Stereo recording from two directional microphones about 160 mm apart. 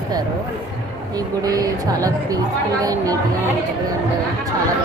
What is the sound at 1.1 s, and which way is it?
Speech, 20° right (ahead or behind).